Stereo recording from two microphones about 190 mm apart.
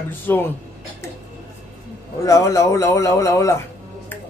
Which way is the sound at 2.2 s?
15° left (ahead or behind).